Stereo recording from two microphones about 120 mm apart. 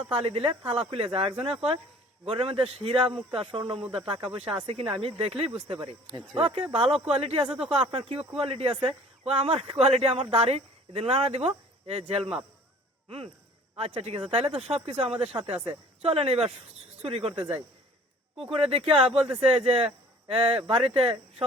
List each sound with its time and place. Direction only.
0.0 s speech: 50° right (ahead or behind)
19.1 s speech: 10° right (ahead or behind)
19.4 s speech: 50° right (ahead or behind)